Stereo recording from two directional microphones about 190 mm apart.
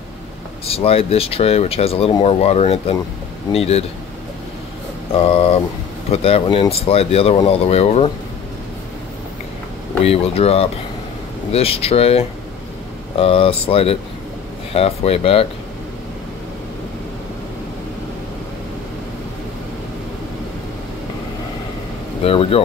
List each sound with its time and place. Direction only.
0.7 s speech: 30° left (ahead or behind)
5.1 s speech: 30° left (ahead or behind)
10.0 s speech: 30° left (ahead or behind)
22.2 s speech: 30° left (ahead or behind)